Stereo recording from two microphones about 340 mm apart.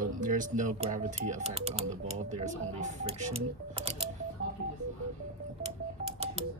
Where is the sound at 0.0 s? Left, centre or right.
Right.